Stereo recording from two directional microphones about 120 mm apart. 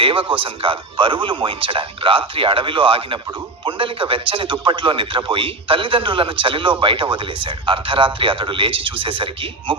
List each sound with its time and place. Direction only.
0.0 s a man's voice: 50° right (ahead or behind)